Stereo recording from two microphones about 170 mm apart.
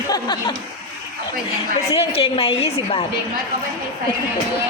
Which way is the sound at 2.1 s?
35° left (ahead or behind).